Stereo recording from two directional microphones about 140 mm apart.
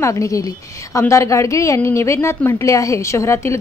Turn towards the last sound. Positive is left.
turn(degrees=20)  # may be behind; listen again after turning